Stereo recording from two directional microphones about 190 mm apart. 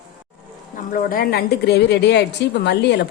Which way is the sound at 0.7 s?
45° left (ahead or behind).